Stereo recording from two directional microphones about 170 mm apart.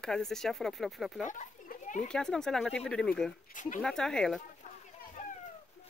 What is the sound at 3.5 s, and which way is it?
Speech, 50° left (ahead or behind).